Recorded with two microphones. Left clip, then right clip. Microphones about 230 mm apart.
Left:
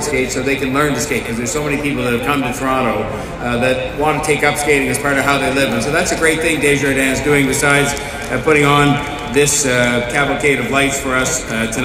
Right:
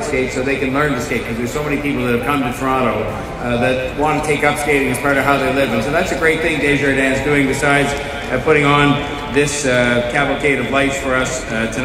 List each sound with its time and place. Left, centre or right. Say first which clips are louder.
2.2 s a man's voice: left 1 dB; left